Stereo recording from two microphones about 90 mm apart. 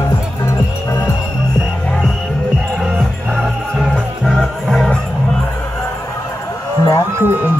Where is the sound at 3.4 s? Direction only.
10° right (ahead or behind).